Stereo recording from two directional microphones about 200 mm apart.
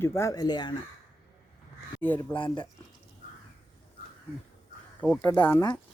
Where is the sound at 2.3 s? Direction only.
25° left (ahead or behind).